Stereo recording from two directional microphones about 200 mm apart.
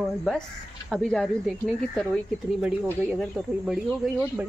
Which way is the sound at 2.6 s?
5° right (ahead or behind).